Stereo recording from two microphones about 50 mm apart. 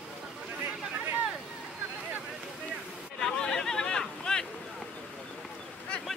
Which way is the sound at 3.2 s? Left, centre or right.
Centre.